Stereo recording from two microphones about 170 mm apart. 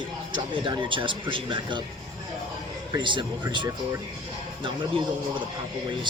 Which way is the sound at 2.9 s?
30° right (ahead or behind).